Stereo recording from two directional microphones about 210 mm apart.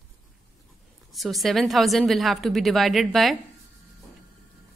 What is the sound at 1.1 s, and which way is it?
A woman's voice, centre (ahead or behind).